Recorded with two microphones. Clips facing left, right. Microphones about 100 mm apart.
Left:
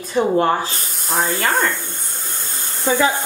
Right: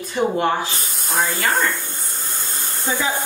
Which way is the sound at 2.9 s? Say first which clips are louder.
Left 6 dB; 65° left (ahead or behind).